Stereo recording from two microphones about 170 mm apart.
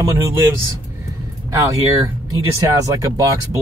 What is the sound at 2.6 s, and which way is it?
Speech, 20° right (ahead or behind).